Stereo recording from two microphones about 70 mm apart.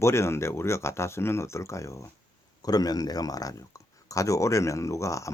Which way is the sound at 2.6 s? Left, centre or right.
Left.